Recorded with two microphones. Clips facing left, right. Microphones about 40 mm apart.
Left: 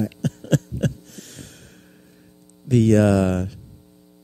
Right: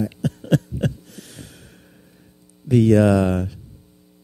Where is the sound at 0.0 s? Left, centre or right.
Centre.